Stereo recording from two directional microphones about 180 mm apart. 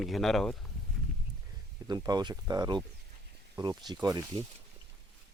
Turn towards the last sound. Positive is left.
turn(degrees=-20)  # may be behind; listen again after turning